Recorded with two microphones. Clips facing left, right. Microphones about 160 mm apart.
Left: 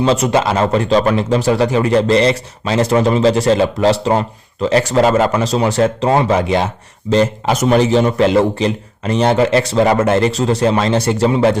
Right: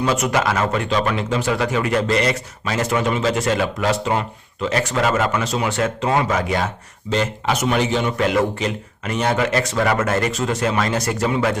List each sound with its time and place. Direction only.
0.0 s speech: 25° left (ahead or behind)